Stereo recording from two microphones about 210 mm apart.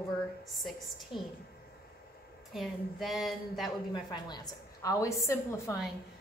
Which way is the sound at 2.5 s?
Centre (ahead or behind).